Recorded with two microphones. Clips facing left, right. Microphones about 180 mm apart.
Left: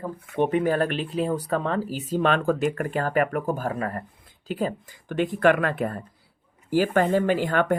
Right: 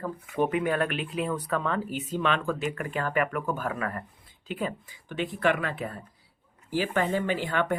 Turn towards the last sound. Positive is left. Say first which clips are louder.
# left 5 dB
turn(degrees=45)  # may be behind; listen again after turning